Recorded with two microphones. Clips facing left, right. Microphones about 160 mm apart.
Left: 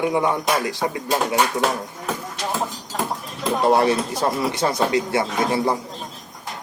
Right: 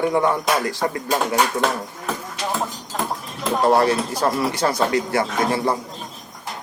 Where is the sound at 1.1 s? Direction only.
5° left (ahead or behind).